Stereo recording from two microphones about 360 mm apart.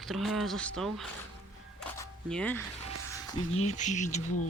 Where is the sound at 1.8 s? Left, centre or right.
Centre.